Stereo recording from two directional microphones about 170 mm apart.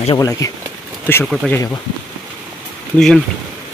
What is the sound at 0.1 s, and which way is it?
Speech, 20° left (ahead or behind).